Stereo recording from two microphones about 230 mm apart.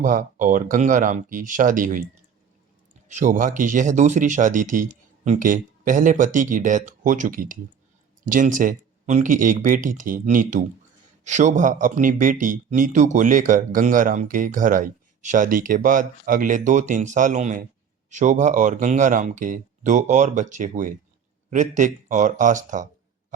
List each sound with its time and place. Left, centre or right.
0.0 s a man's voice: right
3.1 s a man's voice: right